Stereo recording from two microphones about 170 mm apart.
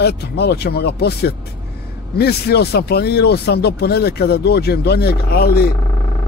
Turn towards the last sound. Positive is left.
turn(degrees=65)  # may be behind; listen again after turning